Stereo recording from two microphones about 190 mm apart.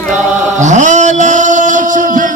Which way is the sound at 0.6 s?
40° right (ahead or behind).